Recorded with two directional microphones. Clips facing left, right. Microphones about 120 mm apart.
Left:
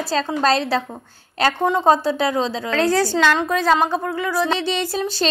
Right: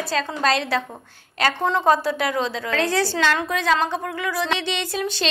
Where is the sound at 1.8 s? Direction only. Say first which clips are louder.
Left 2 dB; 30° left (ahead or behind).